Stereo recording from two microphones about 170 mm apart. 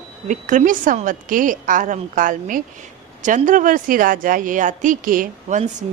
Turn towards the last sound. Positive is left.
turn(degrees=-55)  # may be behind; listen again after turning